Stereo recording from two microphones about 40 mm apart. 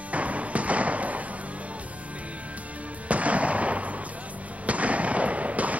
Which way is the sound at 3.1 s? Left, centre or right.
Right.